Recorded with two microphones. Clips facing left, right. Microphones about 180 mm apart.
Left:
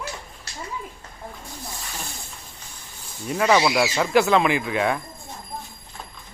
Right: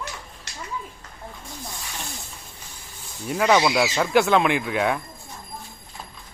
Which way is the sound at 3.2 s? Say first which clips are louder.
Even; centre (ahead or behind).